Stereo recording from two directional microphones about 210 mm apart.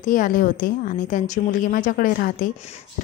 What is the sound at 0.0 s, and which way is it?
A woman's voice, 40° left (ahead or behind).